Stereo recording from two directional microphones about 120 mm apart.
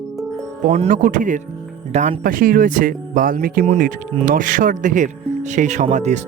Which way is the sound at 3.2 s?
90° right.